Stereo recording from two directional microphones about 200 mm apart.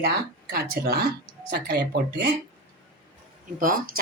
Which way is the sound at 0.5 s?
55° right (ahead or behind).